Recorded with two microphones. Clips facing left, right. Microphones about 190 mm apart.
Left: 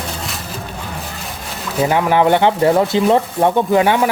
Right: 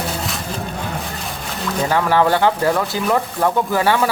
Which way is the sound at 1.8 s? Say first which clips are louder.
Left 3 dB; 15° left (ahead or behind).